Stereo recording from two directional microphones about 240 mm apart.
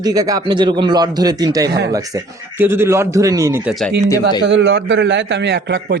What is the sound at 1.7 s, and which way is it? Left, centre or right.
Speech, right.